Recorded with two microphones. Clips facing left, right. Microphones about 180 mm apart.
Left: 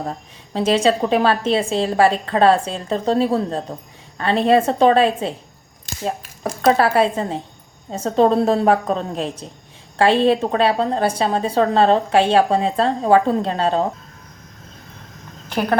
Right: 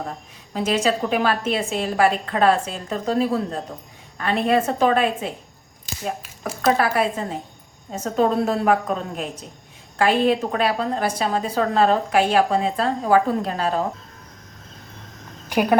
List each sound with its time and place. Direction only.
0.5 s a woman's voice: 30° left (ahead or behind)
6.7 s a woman's voice: 30° left (ahead or behind)
15.4 s speech: 10° right (ahead or behind)